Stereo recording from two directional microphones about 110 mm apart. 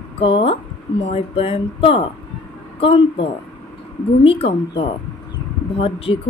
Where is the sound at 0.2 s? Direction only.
55° left (ahead or behind).